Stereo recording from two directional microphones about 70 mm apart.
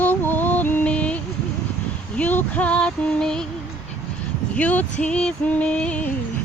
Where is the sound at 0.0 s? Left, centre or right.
Left.